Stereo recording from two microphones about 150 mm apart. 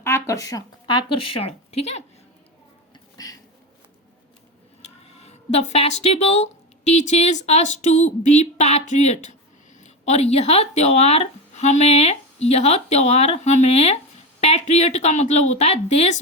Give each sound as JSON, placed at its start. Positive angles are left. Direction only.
{"t": 0.0, "sound": "speech", "side_deg": 20}
{"t": 3.2, "sound": "a sound", "side_deg": 25}
{"t": 5.2, "sound": "speech", "side_deg": 50}